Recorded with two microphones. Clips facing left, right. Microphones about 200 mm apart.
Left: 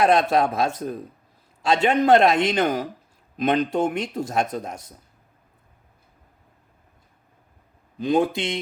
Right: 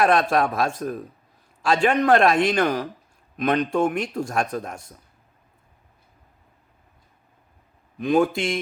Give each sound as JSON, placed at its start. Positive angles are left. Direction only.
{"t": 0.0, "sound": "a man's voice", "side_deg": 20}
{"t": 7.9, "sound": "a man's voice", "side_deg": 25}